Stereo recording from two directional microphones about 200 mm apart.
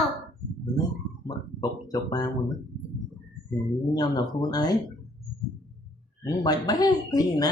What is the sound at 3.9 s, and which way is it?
Speech, 20° left (ahead or behind).